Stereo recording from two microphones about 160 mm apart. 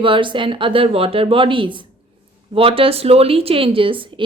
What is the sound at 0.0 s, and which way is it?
A woman's voice, 30° right (ahead or behind).